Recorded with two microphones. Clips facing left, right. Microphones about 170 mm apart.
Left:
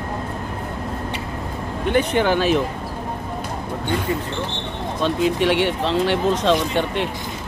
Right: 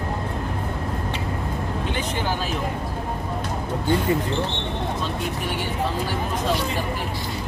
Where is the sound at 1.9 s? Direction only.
60° left (ahead or behind).